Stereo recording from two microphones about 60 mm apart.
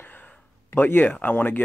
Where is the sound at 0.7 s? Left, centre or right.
Left.